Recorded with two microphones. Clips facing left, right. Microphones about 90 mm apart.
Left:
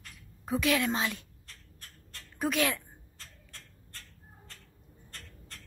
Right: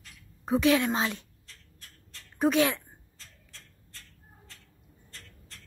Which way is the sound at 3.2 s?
50° left (ahead or behind).